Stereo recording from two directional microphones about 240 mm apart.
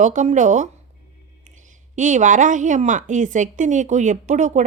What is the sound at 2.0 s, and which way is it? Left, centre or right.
A woman's voice, right.